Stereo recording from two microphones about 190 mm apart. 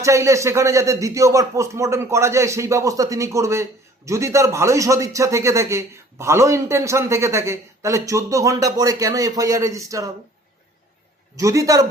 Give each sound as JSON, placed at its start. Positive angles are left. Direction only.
{"t": 0.0, "sound": "speech", "side_deg": -15}
{"t": 11.3, "sound": "speech", "side_deg": -15}